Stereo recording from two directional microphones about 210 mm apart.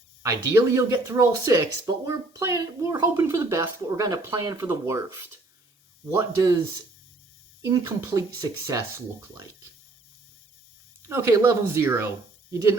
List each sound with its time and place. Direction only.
0.2 s speech: 15° right (ahead or behind)
7.6 s speech: 10° right (ahead or behind)
11.0 s speech: 15° right (ahead or behind)